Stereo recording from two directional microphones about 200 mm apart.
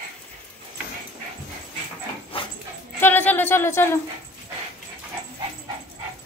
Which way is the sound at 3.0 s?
10° left (ahead or behind).